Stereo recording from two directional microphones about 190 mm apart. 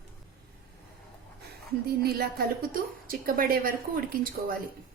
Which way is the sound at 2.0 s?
55° right (ahead or behind).